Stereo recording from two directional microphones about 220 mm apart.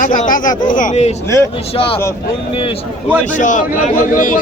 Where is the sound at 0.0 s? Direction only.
35° left (ahead or behind).